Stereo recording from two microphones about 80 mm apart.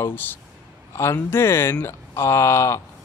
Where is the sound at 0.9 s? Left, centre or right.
Left.